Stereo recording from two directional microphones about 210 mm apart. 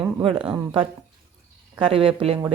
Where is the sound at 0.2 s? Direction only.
25° right (ahead or behind).